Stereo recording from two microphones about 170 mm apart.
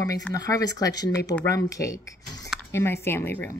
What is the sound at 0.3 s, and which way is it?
Speech, 20° left (ahead or behind).